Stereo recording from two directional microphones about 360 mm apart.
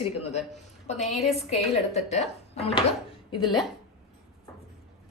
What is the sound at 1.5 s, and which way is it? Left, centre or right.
A woman's voice, centre.